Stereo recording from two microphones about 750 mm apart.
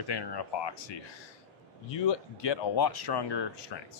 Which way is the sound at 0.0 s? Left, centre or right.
Left.